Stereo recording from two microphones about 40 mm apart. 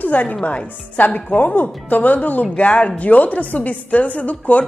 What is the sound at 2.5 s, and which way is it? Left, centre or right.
Speech, left.